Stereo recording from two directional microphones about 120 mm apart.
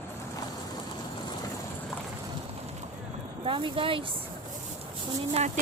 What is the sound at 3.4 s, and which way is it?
Speech, 45° right (ahead or behind).